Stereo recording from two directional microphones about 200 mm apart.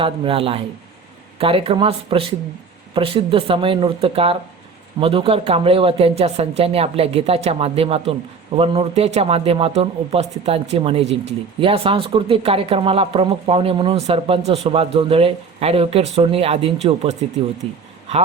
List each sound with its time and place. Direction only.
0.0 s speech: 25° right (ahead or behind)